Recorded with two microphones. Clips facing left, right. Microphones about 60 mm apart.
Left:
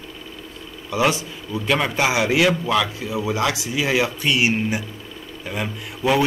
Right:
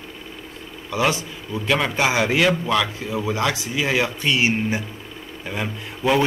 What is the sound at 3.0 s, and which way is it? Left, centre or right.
Speech, centre.